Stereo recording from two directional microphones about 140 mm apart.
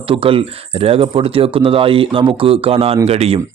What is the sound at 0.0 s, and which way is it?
Speech, 40° right (ahead or behind).